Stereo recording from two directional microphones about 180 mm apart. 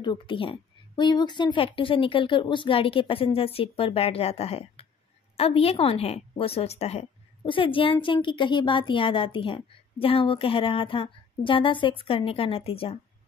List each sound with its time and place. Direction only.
0.0 s a woman's voice: 25° left (ahead or behind)